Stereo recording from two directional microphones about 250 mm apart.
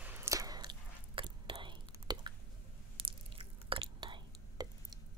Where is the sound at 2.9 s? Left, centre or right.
Right.